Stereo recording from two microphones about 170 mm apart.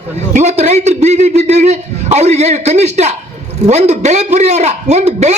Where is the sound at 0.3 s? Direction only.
45° right (ahead or behind).